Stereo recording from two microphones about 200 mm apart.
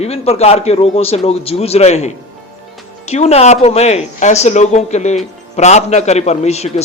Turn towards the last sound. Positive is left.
turn(degrees=35)  # may be behind; listen again after turning